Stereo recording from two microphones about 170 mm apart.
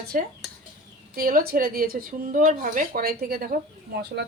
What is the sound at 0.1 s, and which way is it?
Dishes, 55° right (ahead or behind).